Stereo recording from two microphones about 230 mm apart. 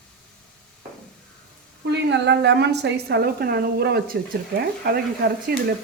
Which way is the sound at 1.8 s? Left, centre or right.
Right.